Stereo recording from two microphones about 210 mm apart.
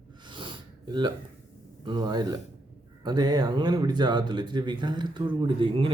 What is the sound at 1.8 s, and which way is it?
Speech, 20° right (ahead or behind).